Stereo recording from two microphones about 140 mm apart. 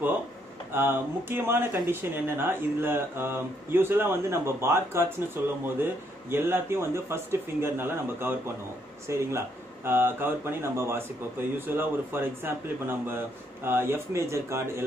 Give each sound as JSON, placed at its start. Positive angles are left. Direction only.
{"t": 0.7, "sound": "speech", "side_deg": -15}